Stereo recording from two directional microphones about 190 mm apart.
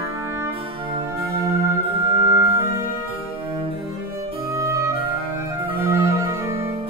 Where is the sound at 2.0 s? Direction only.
20° right (ahead or behind).